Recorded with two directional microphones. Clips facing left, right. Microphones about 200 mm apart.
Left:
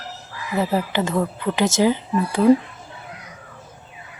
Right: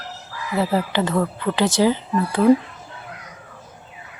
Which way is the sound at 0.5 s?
15° left (ahead or behind).